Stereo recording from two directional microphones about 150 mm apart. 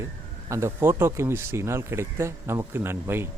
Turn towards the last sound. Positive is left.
turn(degrees=-15)  # may be behind; listen again after turning